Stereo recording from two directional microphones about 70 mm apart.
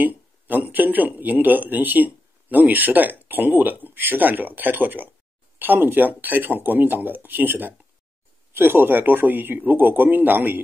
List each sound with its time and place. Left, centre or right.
0.0 s a man's voice: right